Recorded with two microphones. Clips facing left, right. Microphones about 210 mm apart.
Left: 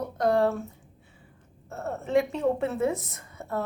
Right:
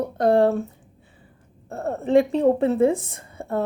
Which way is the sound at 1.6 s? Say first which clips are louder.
Right 7 dB; 35° right (ahead or behind).